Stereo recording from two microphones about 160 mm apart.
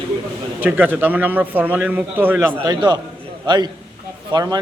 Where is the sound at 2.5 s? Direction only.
25° right (ahead or behind).